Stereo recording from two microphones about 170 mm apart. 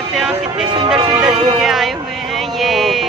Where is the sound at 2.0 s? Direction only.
Centre (ahead or behind).